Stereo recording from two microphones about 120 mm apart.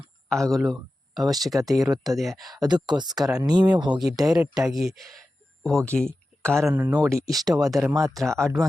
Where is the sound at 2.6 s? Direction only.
35° right (ahead or behind).